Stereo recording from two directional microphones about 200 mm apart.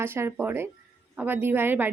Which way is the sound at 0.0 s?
10° right (ahead or behind).